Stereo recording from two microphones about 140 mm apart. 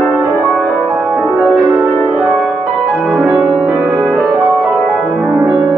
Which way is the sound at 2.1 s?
5° right (ahead or behind).